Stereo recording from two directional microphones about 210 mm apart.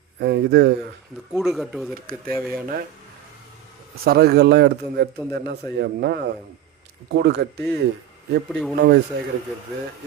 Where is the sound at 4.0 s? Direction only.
45° right (ahead or behind).